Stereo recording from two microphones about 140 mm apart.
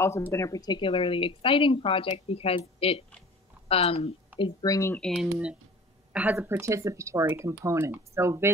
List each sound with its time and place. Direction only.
0.0 s a woman's voice: 20° left (ahead or behind); by 4.6 s 35° left (ahead or behind)
4.6 s speech: 25° left (ahead or behind)
4.9 s speech: 5° left (ahead or behind); by 8.5 s 20° right (ahead or behind)